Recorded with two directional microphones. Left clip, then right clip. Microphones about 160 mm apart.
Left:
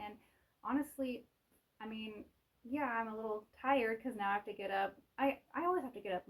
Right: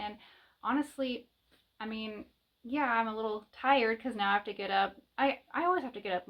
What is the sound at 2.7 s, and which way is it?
Speech, 25° right (ahead or behind).